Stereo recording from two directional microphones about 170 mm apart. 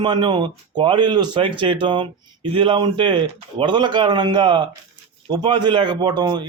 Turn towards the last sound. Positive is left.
turn(degrees=-25)  # may be behind; listen again after turning